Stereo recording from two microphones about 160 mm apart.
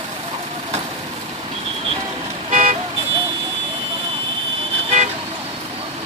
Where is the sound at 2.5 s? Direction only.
45° right (ahead or behind).